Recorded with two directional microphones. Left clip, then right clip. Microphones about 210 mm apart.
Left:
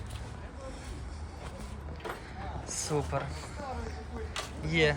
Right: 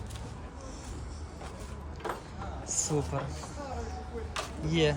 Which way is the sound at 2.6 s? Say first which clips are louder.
Right 1 dB; 20° right (ahead or behind).